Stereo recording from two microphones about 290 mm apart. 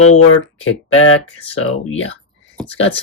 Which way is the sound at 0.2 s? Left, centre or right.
Left.